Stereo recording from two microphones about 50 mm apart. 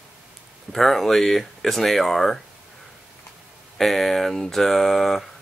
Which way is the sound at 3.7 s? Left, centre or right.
Centre.